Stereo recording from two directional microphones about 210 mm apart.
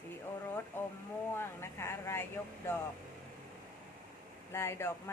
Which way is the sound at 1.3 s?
10° left (ahead or behind).